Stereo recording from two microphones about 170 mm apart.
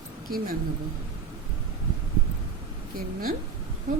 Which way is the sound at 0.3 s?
60° right (ahead or behind).